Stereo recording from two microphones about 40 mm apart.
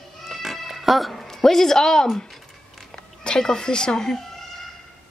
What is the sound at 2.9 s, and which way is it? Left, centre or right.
Speech, centre.